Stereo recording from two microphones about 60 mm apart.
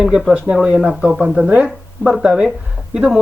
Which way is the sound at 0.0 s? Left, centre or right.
Centre.